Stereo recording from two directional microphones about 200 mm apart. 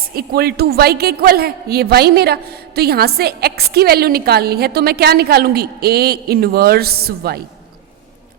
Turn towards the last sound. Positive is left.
turn(degrees=-50)  # may be behind; listen again after turning